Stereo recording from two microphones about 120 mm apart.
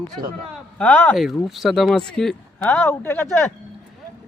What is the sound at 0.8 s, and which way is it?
Speech, 15° left (ahead or behind).